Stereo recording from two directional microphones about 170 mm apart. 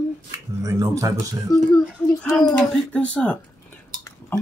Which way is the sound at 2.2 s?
Centre (ahead or behind).